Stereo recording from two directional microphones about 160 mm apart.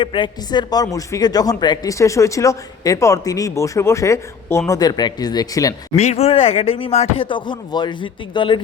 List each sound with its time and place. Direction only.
0.0 s speech: 30° left (ahead or behind)
6.0 s speech: 40° left (ahead or behind)